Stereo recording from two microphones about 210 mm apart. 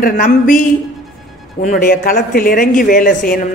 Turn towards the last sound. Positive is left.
turn(degrees=40)  # may be behind; listen again after turning